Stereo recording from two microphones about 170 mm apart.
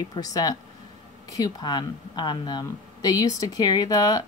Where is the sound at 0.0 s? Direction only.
20° left (ahead or behind).